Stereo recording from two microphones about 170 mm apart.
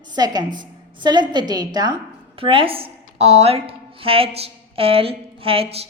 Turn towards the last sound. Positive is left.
turn(degrees=-35)  # may be behind; listen again after turning